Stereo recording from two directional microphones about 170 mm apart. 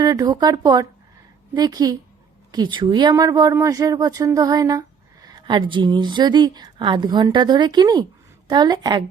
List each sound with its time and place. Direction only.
0.0 s speech: 20° right (ahead or behind)